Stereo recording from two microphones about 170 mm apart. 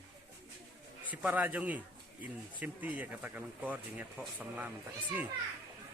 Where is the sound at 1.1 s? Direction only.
10° right (ahead or behind).